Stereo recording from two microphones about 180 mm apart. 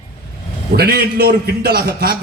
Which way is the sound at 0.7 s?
60° right (ahead or behind).